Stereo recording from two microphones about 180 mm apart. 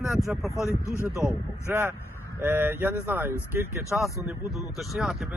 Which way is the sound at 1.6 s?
15° right (ahead or behind).